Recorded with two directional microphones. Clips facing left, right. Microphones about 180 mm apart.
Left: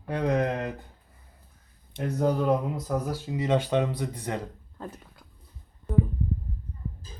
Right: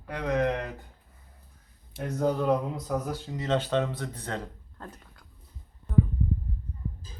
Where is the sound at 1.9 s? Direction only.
5° left (ahead or behind).